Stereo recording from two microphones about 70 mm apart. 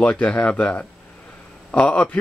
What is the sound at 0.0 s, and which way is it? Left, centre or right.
Speech, centre.